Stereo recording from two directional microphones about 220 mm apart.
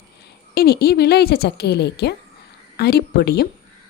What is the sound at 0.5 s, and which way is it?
Speech, 45° left (ahead or behind).